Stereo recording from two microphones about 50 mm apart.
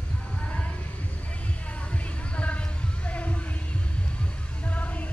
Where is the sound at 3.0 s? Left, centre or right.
Left.